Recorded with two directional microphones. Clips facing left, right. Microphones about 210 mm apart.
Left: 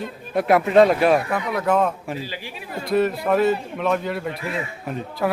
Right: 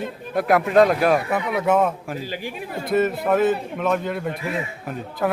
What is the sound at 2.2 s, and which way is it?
Speech, 50° right (ahead or behind).